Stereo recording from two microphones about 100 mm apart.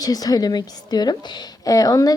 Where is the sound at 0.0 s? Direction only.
40° left (ahead or behind).